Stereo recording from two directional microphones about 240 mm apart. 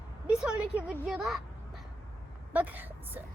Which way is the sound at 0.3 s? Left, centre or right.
Centre.